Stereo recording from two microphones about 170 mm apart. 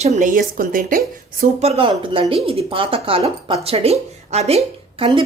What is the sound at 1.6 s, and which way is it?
A woman's voice, 35° right (ahead or behind).